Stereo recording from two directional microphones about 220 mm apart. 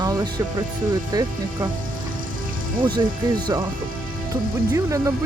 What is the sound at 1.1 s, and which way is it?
Speech, 20° right (ahead or behind).